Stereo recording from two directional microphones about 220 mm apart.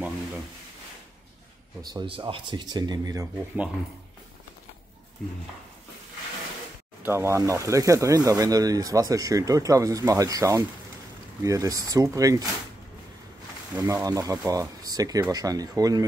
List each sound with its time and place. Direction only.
1.8 s speech: 20° right (ahead or behind)
7.0 s speech: 10° right (ahead or behind)
13.7 s speech: 10° right (ahead or behind)